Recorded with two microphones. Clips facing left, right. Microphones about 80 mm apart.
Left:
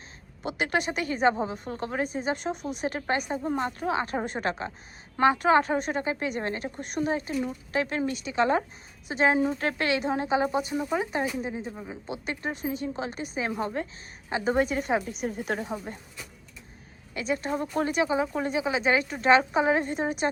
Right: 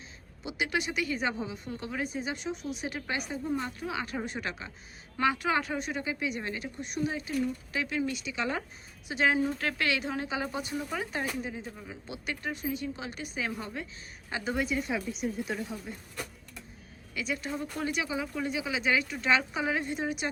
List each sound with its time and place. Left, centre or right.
0.4 s a woman's voice: left
17.2 s speech: left